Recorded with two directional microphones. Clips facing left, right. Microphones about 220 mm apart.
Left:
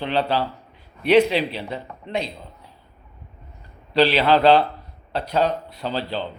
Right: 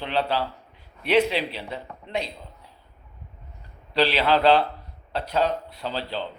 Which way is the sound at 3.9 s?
35° left (ahead or behind).